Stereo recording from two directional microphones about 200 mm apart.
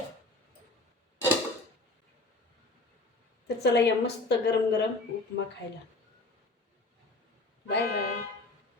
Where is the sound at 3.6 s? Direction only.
55° left (ahead or behind).